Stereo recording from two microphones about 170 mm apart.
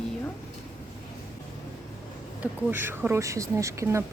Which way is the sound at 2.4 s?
10° right (ahead or behind).